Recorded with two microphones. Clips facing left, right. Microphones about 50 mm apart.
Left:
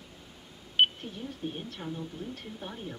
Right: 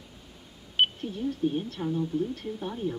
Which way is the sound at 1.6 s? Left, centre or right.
Centre.